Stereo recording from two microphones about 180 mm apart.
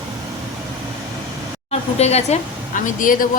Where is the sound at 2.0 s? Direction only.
35° left (ahead or behind).